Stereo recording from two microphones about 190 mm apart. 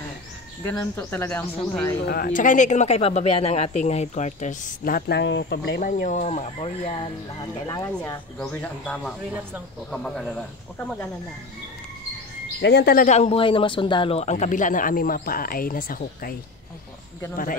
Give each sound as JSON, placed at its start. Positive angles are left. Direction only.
{"t": 0.7, "sound": "speech", "side_deg": 10}
{"t": 2.0, "sound": "speech", "side_deg": 45}
{"t": 5.8, "sound": "speech", "side_deg": 45}
{"t": 7.9, "sound": "speech", "side_deg": 10}
{"t": 12.6, "sound": "speech", "side_deg": 60}